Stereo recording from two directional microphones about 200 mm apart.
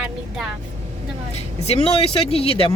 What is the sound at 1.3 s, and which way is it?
Speech, 30° left (ahead or behind).